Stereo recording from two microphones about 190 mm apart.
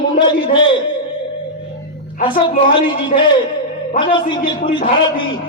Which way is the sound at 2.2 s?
25° left (ahead or behind).